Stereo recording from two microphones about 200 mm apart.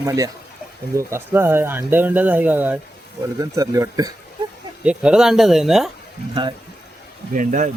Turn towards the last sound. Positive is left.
turn(degrees=-40)  # may be behind; listen again after turning